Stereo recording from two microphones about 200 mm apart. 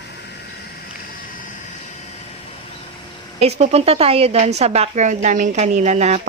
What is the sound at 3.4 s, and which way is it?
A woman's voice, 30° right (ahead or behind).